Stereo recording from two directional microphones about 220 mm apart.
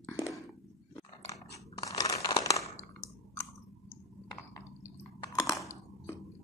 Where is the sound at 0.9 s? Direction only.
15° left (ahead or behind).